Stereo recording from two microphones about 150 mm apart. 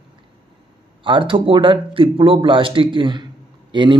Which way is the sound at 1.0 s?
35° right (ahead or behind).